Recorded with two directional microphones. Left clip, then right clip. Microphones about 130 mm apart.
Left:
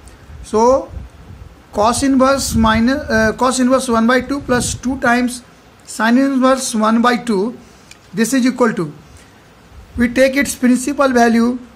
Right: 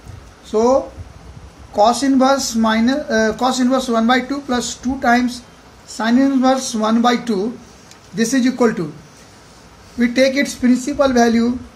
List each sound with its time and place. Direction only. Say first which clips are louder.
0.5 s speech: left 2 dB; 90° left; by 8.8 s 70° left (ahead or behind)
9.9 s speech: left 2 dB; 75° left (ahead or behind)